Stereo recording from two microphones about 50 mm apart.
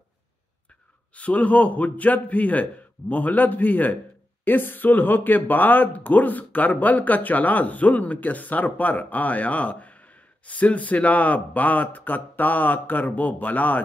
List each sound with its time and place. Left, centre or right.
1.1 s speech: left